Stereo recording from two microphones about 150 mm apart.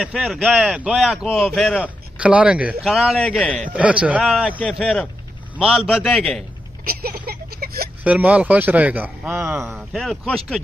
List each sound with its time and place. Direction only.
0.0 s speech: centre (ahead or behind)
3.7 s a man's voice: 10° right (ahead or behind)
6.9 s a sound: 85° right
8.0 s a man's voice: 10° right (ahead or behind)
9.9 s speech: centre (ahead or behind)